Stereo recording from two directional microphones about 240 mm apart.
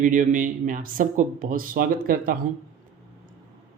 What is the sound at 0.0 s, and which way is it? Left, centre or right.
Speech, right.